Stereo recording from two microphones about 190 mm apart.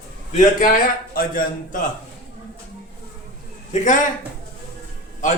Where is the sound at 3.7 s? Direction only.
40° left (ahead or behind).